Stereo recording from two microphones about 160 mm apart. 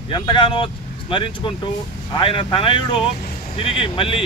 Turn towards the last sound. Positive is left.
turn(degrees=35)  # may be behind; listen again after turning